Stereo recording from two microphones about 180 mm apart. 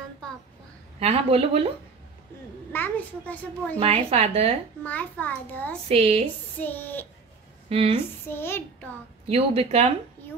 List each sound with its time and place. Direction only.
0.9 s a woman's voice: 35° right (ahead or behind)
2.7 s a child's voice: 10° left (ahead or behind)
3.8 s a woman's voice: 35° right (ahead or behind)
4.8 s a child's voice: 10° left (ahead or behind)
5.9 s a woman's voice: 35° right (ahead or behind)
6.6 s a child's voice: 10° left (ahead or behind)
9.3 s a woman's voice: 35° right (ahead or behind)